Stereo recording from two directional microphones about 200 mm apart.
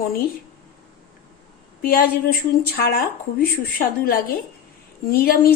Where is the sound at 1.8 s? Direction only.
45° left (ahead or behind).